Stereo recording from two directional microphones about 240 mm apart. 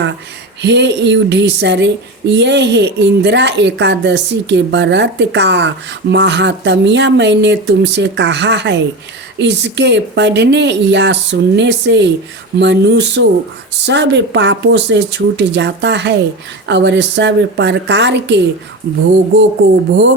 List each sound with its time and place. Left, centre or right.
0.6 s a woman's voice: right